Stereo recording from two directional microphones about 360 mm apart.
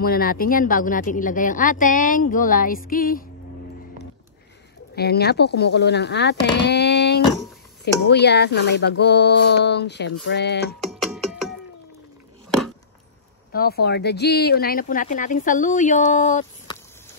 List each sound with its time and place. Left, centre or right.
0.0 s speech: left
4.9 s speech: left
10.9 s music: centre
13.5 s speech: left